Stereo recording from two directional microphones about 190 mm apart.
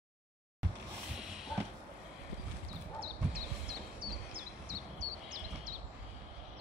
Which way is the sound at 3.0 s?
50° right (ahead or behind).